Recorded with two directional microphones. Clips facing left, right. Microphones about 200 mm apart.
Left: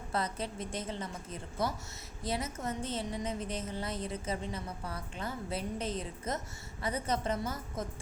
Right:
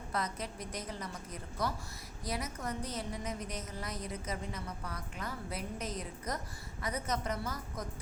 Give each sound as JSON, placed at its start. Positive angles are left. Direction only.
{"t": 0.1, "sound": "a woman's voice", "side_deg": 30}